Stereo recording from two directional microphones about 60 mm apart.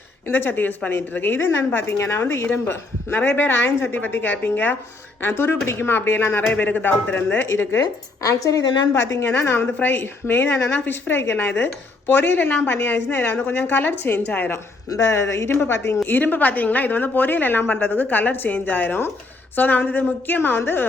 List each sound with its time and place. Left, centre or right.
0.3 s a woman's voice: left
3.9 s a woman's voice: left
7.4 s a woman's voice: left
7.8 s speech: left
9.0 s a woman's voice: left
9.7 s a woman's voice: left
14.8 s speech: left
15.5 s a woman's voice: left